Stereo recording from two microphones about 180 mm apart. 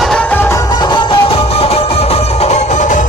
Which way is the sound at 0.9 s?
30° left (ahead or behind).